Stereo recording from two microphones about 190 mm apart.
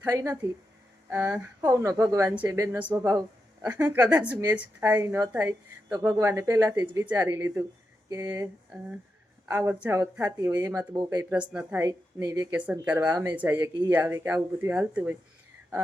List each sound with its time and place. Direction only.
0.0 s a woman's voice: 15° right (ahead or behind)
13.6 s a woman's voice: 20° right (ahead or behind)